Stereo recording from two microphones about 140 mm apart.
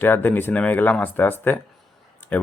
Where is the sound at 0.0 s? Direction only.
15° left (ahead or behind).